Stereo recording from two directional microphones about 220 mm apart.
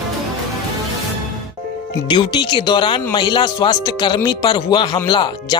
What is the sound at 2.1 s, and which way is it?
Speech, 20° left (ahead or behind).